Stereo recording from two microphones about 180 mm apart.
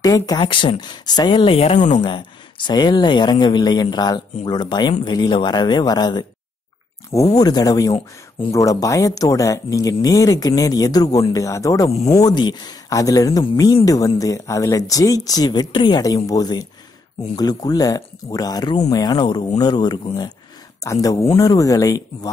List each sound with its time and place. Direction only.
0.0 s speech: 20° left (ahead or behind); by 2.0 s 40° left (ahead or behind)
2.0 s speech: 25° left (ahead or behind)
7.3 s speech: 20° left (ahead or behind)